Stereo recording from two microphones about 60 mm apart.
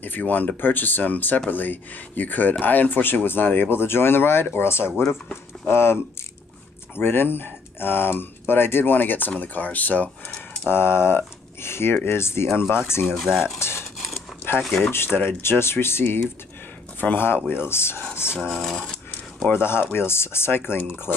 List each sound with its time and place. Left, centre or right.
0.0 s speech: left
7.0 s speech: left
10.7 s speech: left
13.0 s speech: centre
13.6 s a sound: left
13.9 s a sound: centre
14.8 s speech: left
18.3 s speech: centre
18.6 s speech: centre
19.4 s speech: left